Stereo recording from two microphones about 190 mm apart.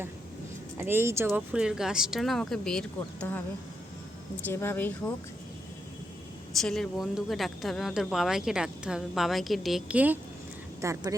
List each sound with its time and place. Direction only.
0.8 s speech: 10° right (ahead or behind); by 3.4 s 10° left (ahead or behind)
4.4 s speech: 10° left (ahead or behind)
6.6 s speech: centre (ahead or behind); by 11.1 s 15° right (ahead or behind)